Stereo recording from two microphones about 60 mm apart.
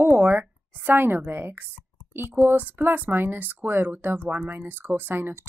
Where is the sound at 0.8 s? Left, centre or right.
Right.